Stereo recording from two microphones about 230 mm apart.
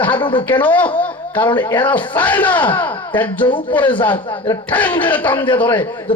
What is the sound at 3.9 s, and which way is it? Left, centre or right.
Speech, centre.